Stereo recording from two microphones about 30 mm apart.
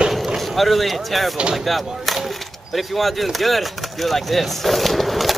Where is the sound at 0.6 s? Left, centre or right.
Centre.